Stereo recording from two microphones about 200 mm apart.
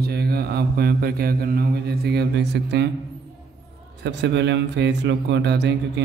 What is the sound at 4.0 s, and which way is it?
A man's voice, 60° right (ahead or behind).